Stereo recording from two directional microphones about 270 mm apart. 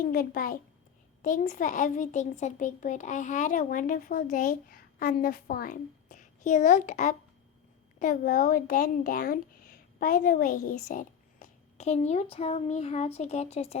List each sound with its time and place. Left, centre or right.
0.0 s a woman's voice: left